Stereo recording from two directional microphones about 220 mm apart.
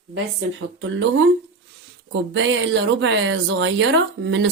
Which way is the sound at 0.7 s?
60° right (ahead or behind).